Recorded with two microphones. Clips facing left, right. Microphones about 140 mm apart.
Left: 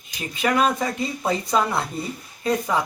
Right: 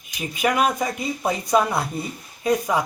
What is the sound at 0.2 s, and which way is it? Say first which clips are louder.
Speech: even; 15° right (ahead or behind).